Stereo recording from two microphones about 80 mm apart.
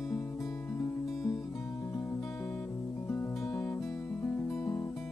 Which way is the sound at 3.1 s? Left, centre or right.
Left.